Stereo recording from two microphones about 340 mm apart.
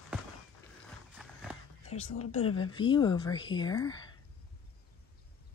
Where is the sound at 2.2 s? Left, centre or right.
Centre.